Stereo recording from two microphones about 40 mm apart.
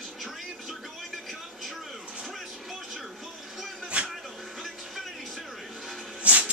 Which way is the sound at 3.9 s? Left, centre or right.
Right.